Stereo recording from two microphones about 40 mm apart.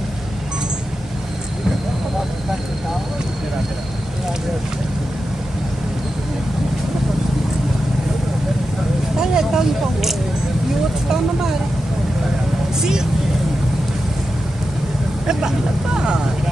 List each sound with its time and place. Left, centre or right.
9.1 s single-lens reflex camera: centre
15.2 s vehicle: centre